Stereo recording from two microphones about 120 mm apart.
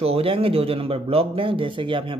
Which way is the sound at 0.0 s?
55° right (ahead or behind).